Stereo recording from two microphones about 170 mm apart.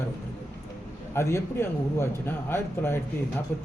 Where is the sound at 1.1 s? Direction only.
15° left (ahead or behind).